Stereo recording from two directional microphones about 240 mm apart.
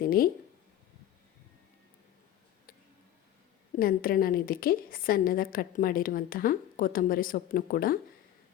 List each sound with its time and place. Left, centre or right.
0.0 s a woman's voice: left
3.8 s a woman's voice: left